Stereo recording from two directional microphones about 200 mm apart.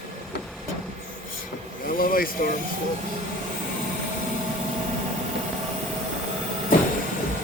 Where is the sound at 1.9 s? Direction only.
45° left (ahead or behind).